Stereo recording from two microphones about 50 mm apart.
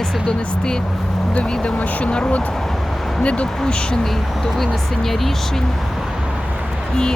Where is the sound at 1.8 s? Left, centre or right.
Left.